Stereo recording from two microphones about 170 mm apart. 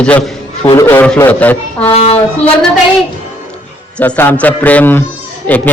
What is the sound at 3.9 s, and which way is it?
A man's voice, 10° left (ahead or behind).